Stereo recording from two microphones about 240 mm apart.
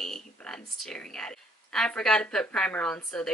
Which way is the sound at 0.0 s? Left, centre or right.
Centre.